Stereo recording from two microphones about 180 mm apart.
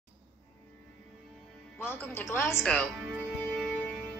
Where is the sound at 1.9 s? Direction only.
10° left (ahead or behind).